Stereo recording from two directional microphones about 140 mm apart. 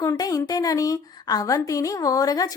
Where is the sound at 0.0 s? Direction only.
25° left (ahead or behind).